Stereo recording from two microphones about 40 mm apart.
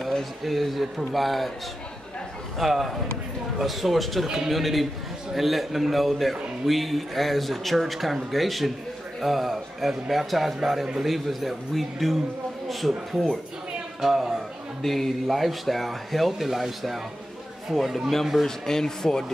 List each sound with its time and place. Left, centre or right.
0.0 s speech: centre
2.6 s a man's voice: centre
14.8 s speech: centre
18.7 s speech: centre